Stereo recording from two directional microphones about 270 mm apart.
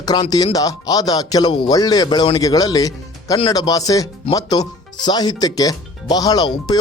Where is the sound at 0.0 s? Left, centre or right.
Centre.